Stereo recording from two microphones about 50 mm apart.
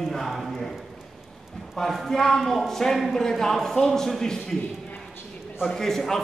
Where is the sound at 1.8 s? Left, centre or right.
Centre.